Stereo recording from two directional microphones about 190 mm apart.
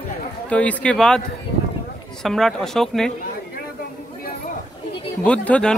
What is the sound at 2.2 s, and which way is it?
Speech, centre (ahead or behind).